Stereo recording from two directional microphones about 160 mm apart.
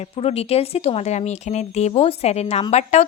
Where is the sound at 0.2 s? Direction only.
40° left (ahead or behind).